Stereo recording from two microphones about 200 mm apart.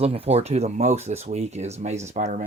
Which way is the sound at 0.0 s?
30° right (ahead or behind).